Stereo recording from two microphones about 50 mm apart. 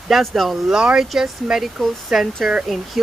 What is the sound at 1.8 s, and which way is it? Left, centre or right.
Speech, centre.